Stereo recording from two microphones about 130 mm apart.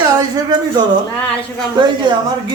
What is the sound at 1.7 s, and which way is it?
Speech, 35° right (ahead or behind).